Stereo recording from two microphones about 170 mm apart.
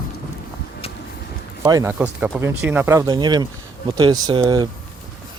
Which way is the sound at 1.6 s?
20° right (ahead or behind).